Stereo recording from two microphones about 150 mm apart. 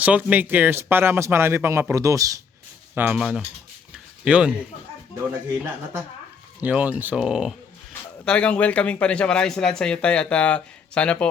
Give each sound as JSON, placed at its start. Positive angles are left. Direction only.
{"t": 0.0, "sound": "speech", "side_deg": -10}
{"t": 3.2, "sound": "speech", "side_deg": -5}
{"t": 3.9, "sound": "a sound", "side_deg": -5}
{"t": 5.5, "sound": "a man's voice", "side_deg": -15}